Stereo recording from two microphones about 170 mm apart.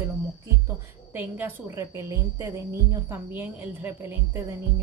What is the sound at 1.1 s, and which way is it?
A woman's voice, 10° right (ahead or behind).